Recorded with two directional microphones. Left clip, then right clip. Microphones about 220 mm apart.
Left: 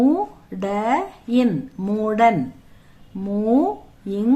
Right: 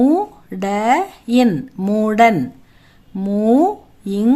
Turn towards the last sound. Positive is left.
turn(degrees=-50)  # may be behind; listen again after turning